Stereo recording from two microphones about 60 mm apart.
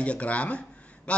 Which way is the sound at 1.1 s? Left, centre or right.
Left.